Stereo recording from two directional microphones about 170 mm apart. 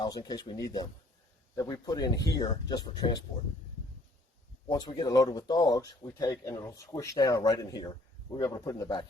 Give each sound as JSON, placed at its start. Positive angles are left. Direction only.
{"t": 0.0, "sound": "speech", "side_deg": 25}
{"t": 4.7, "sound": "speech", "side_deg": 20}